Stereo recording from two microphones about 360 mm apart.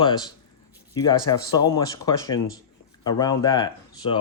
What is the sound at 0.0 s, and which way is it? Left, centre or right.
Speech, centre.